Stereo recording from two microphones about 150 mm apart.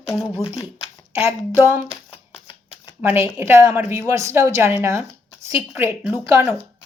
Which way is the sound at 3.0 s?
15° right (ahead or behind).